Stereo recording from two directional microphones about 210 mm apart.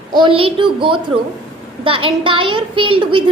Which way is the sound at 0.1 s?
20° right (ahead or behind).